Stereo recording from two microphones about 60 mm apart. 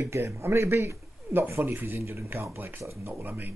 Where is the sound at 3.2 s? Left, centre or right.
Right.